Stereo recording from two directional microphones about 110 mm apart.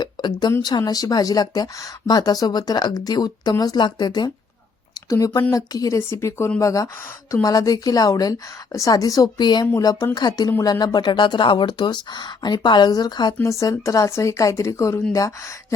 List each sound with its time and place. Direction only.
0.0 s a woman's voice: 40° left (ahead or behind)